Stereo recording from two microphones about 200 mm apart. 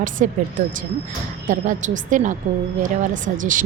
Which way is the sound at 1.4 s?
40° right (ahead or behind).